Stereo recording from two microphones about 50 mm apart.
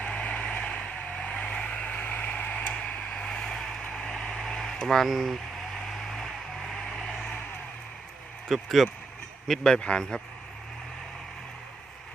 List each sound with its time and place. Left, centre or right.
0.0 s vehicle: left
3.3 s vehicle: centre
4.4 s a sound: centre
5.0 s speech: centre
5.9 s vehicle: centre
8.4 s speech: centre
9.5 s speech: centre